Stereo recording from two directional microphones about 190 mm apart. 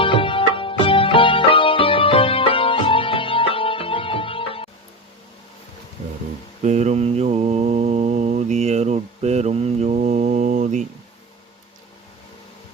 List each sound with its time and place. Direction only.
0.0 s music: 25° left (ahead or behind)
6.6 s mantra: 35° right (ahead or behind)